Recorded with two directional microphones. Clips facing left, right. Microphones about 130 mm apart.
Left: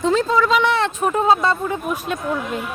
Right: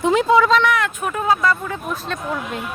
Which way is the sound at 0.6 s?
25° left (ahead or behind).